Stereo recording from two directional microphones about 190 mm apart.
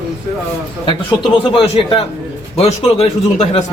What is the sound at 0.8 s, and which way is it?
A man's voice, 25° left (ahead or behind).